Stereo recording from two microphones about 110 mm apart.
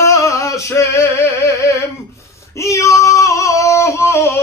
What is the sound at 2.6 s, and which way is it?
Female singing, 30° left (ahead or behind).